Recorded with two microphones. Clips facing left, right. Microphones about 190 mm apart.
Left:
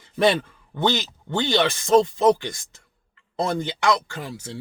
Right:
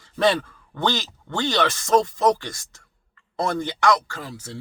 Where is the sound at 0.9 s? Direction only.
20° left (ahead or behind).